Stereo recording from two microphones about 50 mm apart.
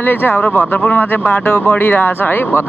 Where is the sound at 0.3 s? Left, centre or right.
Left.